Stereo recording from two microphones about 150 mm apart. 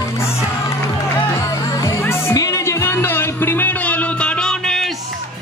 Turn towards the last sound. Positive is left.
turn(degrees=5)  # may be behind; listen again after turning